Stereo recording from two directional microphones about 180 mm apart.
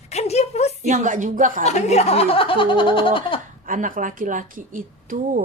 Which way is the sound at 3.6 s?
50° right (ahead or behind).